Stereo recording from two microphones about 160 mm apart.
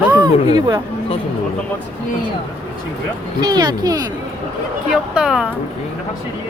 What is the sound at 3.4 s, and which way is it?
Speech, 25° right (ahead or behind).